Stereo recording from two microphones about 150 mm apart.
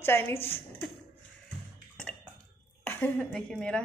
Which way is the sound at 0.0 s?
15° left (ahead or behind).